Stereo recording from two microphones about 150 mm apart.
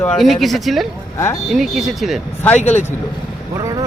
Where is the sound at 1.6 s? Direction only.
Centre (ahead or behind).